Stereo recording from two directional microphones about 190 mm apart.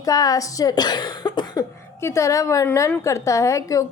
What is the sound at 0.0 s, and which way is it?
Speech, 20° left (ahead or behind).